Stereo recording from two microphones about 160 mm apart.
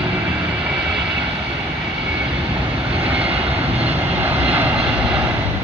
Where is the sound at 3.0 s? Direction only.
10° right (ahead or behind).